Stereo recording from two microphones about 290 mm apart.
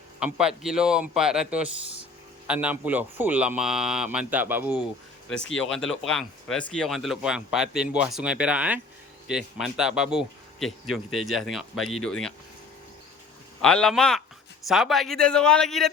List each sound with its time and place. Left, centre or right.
0.2 s speech: centre
13.6 s speech: centre